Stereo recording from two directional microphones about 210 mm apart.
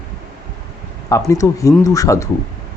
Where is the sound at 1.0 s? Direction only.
15° left (ahead or behind).